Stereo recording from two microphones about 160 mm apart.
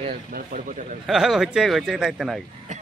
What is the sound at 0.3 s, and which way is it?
Speech, 55° right (ahead or behind).